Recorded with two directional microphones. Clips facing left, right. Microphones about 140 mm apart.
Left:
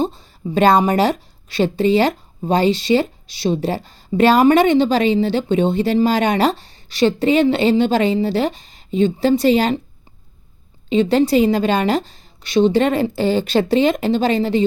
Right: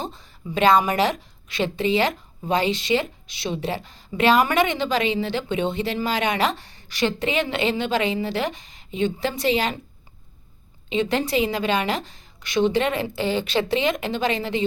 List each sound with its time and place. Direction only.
0.0 s a woman's voice: 30° left (ahead or behind)
10.8 s a woman's voice: 35° left (ahead or behind)